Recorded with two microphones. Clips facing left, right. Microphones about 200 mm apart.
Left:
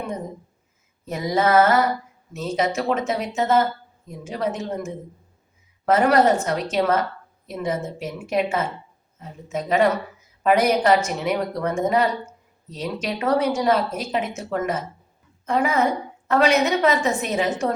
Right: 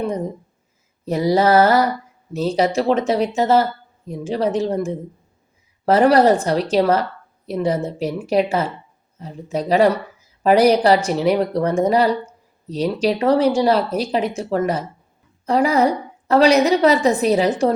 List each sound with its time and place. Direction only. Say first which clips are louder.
1.0 s a woman's voice: right 5 dB; 35° right (ahead or behind)